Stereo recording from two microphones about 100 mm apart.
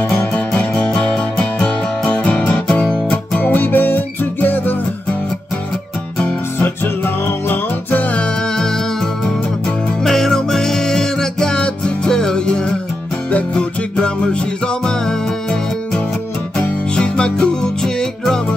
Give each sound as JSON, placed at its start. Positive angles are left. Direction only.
{"t": 0.1, "sound": "music", "side_deg": 10}
{"t": 6.1, "sound": "music", "side_deg": 15}
{"t": 16.6, "sound": "music", "side_deg": 10}